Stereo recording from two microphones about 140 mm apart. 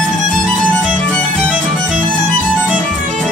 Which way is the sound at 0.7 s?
5° left (ahead or behind).